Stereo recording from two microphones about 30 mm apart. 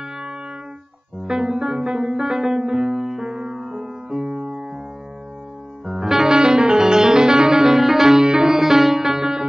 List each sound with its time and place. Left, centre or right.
1.2 s music: right
3.0 s music: centre
3.3 s music: right
4.3 s music: right
5.9 s music: centre